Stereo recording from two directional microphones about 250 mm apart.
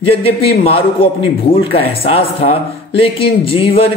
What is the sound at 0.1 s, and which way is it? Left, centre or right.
A man's voice, left.